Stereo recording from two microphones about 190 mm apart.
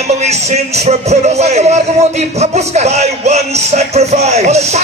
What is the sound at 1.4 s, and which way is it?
Music, 35° right (ahead or behind).